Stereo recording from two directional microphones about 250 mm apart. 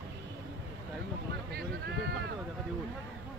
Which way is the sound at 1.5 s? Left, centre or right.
Right.